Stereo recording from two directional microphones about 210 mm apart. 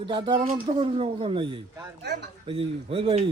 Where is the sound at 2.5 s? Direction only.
25° right (ahead or behind).